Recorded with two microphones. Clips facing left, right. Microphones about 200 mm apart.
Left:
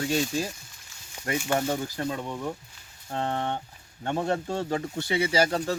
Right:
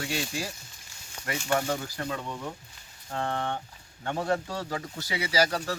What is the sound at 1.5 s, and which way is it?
Speech, 25° left (ahead or behind).